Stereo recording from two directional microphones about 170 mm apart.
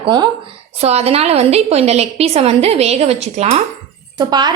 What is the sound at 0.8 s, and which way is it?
A woman's voice, 40° right (ahead or behind).